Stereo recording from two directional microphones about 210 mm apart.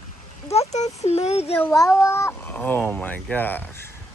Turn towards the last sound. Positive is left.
turn(degrees=10)  # may be behind; listen again after turning